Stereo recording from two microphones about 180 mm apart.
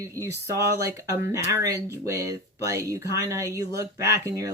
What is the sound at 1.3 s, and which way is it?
Speech, 20° right (ahead or behind).